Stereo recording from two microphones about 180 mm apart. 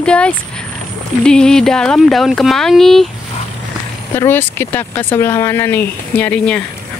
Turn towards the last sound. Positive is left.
turn(degrees=10)  # may be behind; listen again after turning